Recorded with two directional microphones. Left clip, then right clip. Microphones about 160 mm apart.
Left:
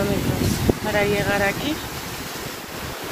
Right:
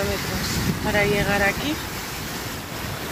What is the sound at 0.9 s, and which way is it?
Speech, centre (ahead or behind).